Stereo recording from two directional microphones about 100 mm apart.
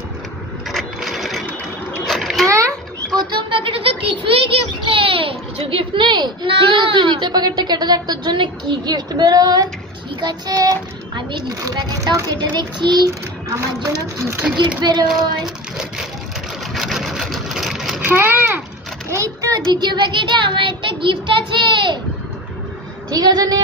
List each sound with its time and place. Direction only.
0.7 s sewing machine: centre (ahead or behind)
2.0 s a sound: centre (ahead or behind)
3.2 s a sound: 50° right (ahead or behind)
10.2 s a child's voice: 40° right (ahead or behind)
13.5 s a woman's voice: 30° right (ahead or behind)
14.8 s a child's voice: 45° right (ahead or behind)
15.0 s child singing: 5° right (ahead or behind)
16.7 s vehicle: centre (ahead or behind)
18.0 s a child's voice: 25° right (ahead or behind)
19.0 s a sound: 30° right (ahead or behind)
19.5 s a child's voice: 45° right (ahead or behind)
23.0 s a woman's voice: 40° right (ahead or behind)